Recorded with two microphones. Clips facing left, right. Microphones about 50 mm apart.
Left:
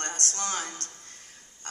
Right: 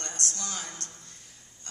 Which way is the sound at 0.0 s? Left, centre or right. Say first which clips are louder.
Left 4 dB; left.